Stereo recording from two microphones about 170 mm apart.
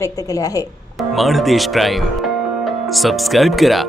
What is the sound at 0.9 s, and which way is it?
Speech, centre (ahead or behind).